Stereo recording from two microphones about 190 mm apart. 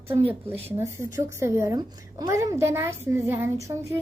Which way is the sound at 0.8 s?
15° right (ahead or behind).